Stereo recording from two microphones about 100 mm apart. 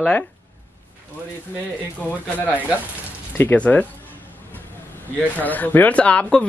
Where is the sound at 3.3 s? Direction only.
15° left (ahead or behind).